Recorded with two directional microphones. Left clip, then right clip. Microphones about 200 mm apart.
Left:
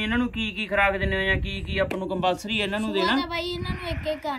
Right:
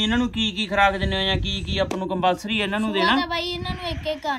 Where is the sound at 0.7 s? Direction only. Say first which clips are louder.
Right 2 dB; 30° right (ahead or behind).